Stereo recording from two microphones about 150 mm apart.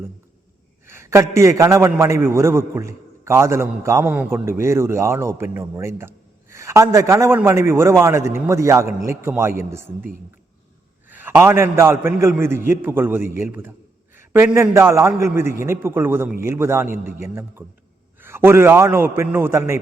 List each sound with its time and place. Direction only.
0.9 s a man's voice: 20° right (ahead or behind)
11.1 s a man's voice: 15° right (ahead or behind)